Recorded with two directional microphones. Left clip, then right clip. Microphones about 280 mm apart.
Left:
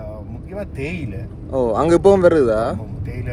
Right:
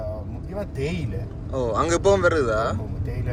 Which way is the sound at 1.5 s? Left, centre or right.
Centre.